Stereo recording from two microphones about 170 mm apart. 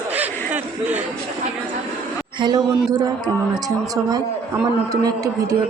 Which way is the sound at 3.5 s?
20° right (ahead or behind).